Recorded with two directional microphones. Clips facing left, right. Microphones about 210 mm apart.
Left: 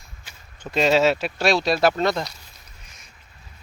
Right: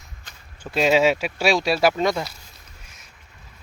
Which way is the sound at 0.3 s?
10° left (ahead or behind).